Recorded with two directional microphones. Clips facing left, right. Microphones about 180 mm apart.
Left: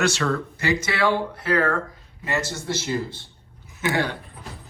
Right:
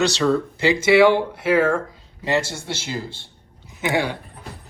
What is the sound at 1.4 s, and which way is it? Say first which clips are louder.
Speech: right 4 dB; 10° right (ahead or behind).